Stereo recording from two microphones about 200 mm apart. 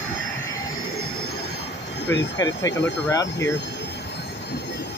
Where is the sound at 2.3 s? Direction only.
20° left (ahead or behind).